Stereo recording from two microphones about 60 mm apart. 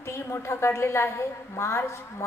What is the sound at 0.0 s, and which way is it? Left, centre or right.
A woman's voice, left.